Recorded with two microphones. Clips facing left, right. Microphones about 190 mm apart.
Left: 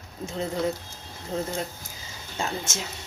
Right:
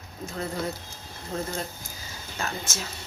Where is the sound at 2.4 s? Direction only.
30° left (ahead or behind).